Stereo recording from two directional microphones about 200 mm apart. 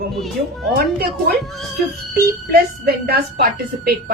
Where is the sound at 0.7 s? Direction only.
50° right (ahead or behind).